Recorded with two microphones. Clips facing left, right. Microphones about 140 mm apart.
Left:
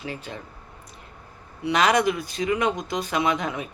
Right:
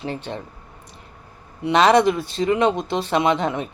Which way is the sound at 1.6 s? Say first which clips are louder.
Right 5 dB; 25° right (ahead or behind).